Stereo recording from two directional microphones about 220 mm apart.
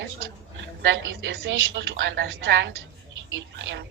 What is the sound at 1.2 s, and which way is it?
A woman's voice, 55° right (ahead or behind).